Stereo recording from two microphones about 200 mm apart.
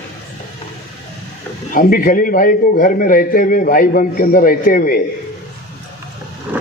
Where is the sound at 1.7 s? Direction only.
45° left (ahead or behind).